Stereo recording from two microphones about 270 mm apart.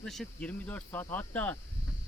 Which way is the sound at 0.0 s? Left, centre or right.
Centre.